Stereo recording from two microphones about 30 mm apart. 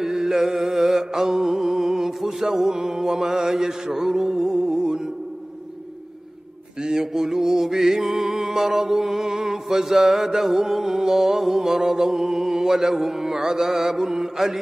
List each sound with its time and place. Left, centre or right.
0.0 s music: centre
2.9 s mantra: centre
6.8 s music: centre
11.8 s mantra: centre
14.3 s music: centre